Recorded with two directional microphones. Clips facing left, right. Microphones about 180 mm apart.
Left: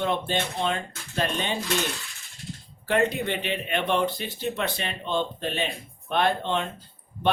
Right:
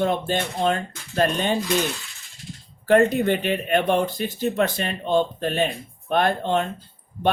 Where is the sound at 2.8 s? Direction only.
45° right (ahead or behind).